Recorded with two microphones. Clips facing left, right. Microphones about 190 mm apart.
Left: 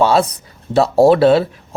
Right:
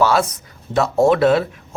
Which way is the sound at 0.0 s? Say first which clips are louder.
Left 3 dB; 30° left (ahead or behind).